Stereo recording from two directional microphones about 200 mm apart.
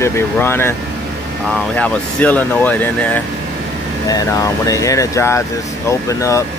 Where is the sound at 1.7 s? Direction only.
5° left (ahead or behind).